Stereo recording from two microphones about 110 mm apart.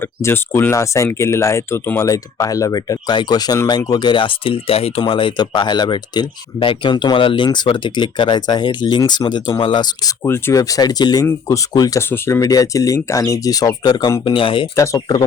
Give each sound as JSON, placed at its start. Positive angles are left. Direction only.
{"t": 0.0, "sound": "speech", "side_deg": 20}
{"t": 10.2, "sound": "speech", "side_deg": 20}
{"t": 10.6, "sound": "speech", "side_deg": 35}
{"t": 11.9, "sound": "speech", "side_deg": 20}
{"t": 12.4, "sound": "speech", "side_deg": 35}
{"t": 14.3, "sound": "speech", "side_deg": 50}
{"t": 14.8, "sound": "speech", "side_deg": 35}